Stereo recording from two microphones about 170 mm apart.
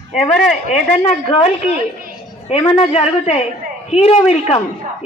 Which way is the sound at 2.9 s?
40° left (ahead or behind).